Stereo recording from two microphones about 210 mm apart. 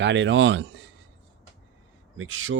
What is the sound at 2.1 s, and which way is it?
Speech, 70° right (ahead or behind).